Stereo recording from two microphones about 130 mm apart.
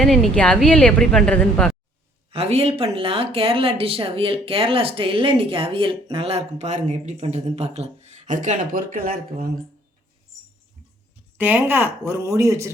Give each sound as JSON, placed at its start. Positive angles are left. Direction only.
{"t": 0.0, "sound": "a woman's voice", "side_deg": 0}
{"t": 2.3, "sound": "speech", "side_deg": -50}
{"t": 11.3, "sound": "speech", "side_deg": -15}